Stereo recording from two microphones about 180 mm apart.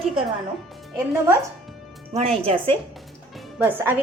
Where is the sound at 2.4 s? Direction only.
30° right (ahead or behind).